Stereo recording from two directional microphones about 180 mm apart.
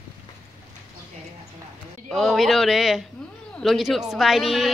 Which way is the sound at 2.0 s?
Centre (ahead or behind).